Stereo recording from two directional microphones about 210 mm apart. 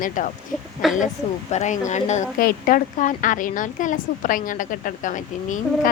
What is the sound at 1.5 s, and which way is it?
Speech, 35° left (ahead or behind).